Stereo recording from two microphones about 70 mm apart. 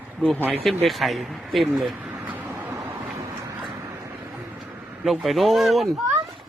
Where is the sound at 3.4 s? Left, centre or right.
Right.